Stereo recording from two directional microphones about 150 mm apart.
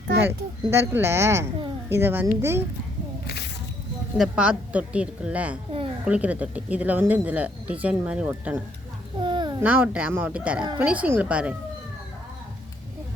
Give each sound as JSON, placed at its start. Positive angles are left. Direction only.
{"t": 0.2, "sound": "speech", "side_deg": -15}
{"t": 3.2, "sound": "snake", "side_deg": 90}
{"t": 4.2, "sound": "speech", "side_deg": -5}
{"t": 9.2, "sound": "babbling", "side_deg": -30}
{"t": 9.6, "sound": "speech", "side_deg": -10}